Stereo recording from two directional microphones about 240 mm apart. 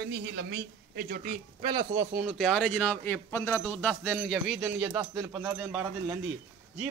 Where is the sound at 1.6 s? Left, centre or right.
Centre.